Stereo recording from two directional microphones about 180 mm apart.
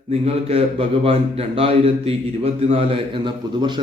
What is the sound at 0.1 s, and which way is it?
A man's voice, 35° right (ahead or behind).